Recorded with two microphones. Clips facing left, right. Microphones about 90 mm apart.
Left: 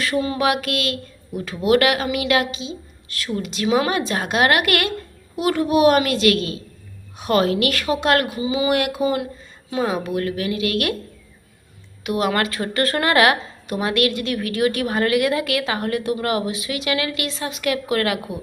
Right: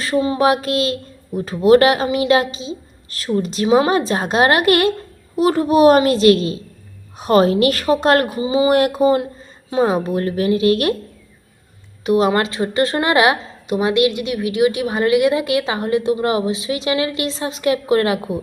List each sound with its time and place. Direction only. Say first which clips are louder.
0.0 s speech: right 4 dB; 30° right (ahead or behind)
12.0 s a woman's voice: right 5 dB; 30° right (ahead or behind)